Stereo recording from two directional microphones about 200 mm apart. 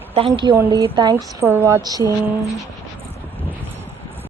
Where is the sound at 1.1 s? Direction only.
10° right (ahead or behind).